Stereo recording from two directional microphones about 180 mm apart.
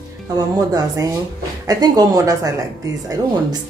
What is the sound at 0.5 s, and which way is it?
Speech, 20° right (ahead or behind).